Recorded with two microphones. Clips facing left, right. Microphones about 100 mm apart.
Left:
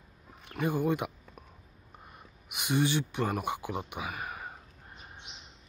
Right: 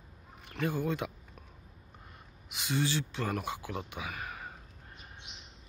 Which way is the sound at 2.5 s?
15° left (ahead or behind).